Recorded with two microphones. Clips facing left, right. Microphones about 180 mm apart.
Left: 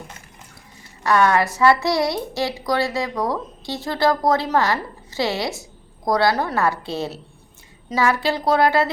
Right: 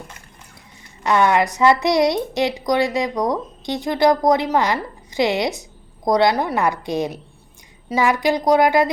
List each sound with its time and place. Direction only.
1.0 s a woman's voice: 20° right (ahead or behind)